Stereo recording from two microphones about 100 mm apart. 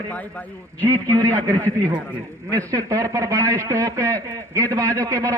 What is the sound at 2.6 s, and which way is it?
A man's voice, 35° right (ahead or behind).